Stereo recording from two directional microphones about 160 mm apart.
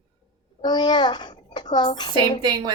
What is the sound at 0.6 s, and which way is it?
A child's voice, 25° left (ahead or behind).